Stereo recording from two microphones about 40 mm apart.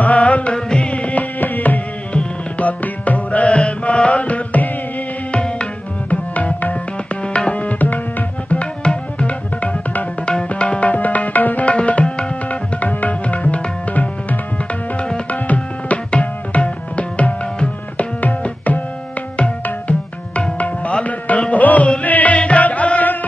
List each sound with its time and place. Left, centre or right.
0.0 s music: left
5.3 s tabla: left
6.0 s tabla: left
7.3 s tabla: left
7.6 s tabla: left
8.5 s tabla: left
11.6 s tabla: left
19.3 s music: left
20.5 s tabla: left
21.0 s music: left